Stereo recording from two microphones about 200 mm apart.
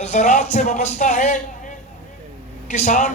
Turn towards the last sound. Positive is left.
turn(degrees=35)  # may be behind; listen again after turning